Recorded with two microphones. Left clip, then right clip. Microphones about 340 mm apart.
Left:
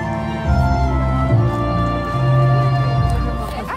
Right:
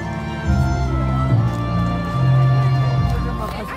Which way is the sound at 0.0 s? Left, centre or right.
Left.